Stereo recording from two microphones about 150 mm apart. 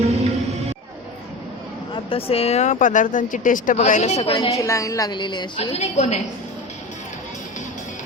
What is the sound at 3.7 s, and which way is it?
Speech, 50° left (ahead or behind).